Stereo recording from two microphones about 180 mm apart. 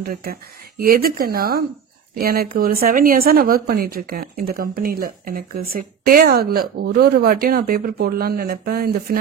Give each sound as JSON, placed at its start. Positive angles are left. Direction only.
{"t": 0.0, "sound": "speech", "side_deg": -55}